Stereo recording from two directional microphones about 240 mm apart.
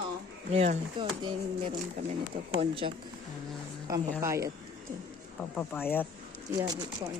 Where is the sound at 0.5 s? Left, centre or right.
Right.